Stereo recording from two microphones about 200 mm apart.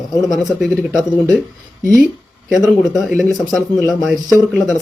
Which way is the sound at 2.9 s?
Centre (ahead or behind).